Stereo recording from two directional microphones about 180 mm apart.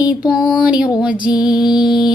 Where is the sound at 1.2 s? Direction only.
25° left (ahead or behind).